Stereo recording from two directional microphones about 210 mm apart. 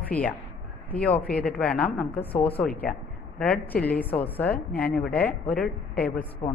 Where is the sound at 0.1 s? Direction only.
5° left (ahead or behind).